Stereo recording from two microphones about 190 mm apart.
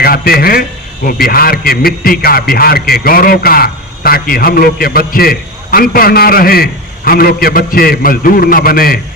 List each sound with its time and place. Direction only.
0.0 s a man's voice: 50° left (ahead or behind)